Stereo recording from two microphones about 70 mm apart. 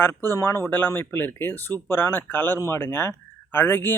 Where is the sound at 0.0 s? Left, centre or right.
Left.